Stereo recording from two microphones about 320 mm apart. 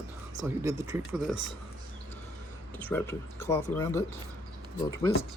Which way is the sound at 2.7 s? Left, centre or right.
Centre.